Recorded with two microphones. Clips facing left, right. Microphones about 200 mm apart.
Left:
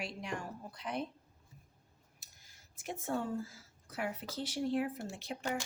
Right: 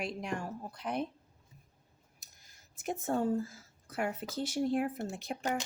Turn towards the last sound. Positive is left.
turn(degrees=-50)  # may be behind; listen again after turning